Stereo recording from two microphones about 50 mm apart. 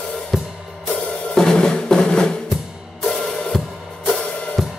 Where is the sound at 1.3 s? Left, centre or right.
Centre.